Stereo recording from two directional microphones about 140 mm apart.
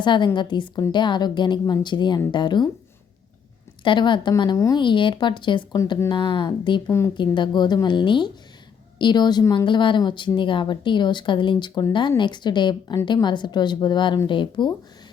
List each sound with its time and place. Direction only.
0.0 s a woman's voice: 35° left (ahead or behind)
3.8 s a woman's voice: 35° left (ahead or behind)
4.8 s a woman's voice: 35° left (ahead or behind)